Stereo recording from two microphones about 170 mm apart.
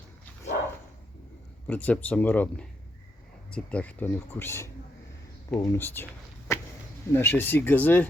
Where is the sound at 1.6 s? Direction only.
10° left (ahead or behind).